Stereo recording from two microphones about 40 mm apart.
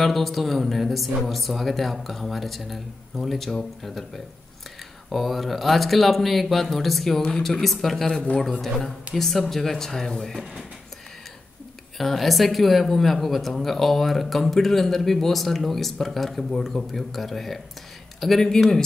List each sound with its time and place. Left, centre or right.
0.0 s speech: centre
7.2 s a woman's voice: left
7.6 s speech: centre
12.0 s speech: centre